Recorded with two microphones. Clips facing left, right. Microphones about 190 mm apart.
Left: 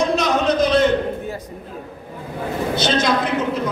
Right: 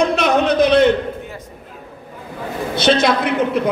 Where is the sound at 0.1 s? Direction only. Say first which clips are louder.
Right 2 dB; 60° right (ahead or behind).